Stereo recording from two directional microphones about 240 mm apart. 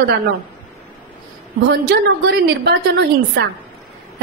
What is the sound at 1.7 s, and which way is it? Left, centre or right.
A woman's voice, right.